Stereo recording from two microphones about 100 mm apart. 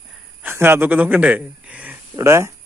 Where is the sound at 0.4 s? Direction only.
20° right (ahead or behind).